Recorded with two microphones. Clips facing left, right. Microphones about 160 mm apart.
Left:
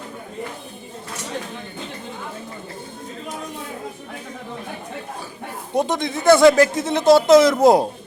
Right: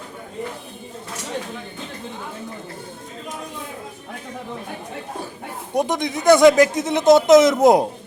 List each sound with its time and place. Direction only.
5.7 s speech: 20° right (ahead or behind)